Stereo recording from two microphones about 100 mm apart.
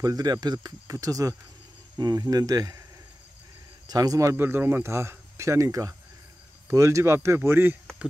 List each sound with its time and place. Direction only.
0.0 s speech: 40° right (ahead or behind)
3.8 s speech: 40° right (ahead or behind)
4.4 s speech: 20° right (ahead or behind)